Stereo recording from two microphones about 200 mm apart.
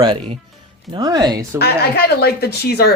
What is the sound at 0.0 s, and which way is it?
Speech, 25° right (ahead or behind).